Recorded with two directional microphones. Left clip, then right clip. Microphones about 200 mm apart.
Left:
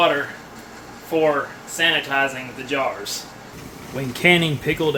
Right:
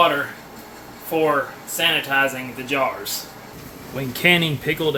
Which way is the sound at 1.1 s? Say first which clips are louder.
Even; 20° right (ahead or behind).